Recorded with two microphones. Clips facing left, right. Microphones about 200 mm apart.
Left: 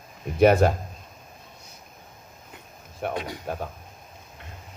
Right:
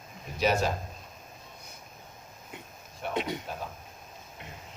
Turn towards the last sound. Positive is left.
turn(degrees=-20)  # may be behind; listen again after turning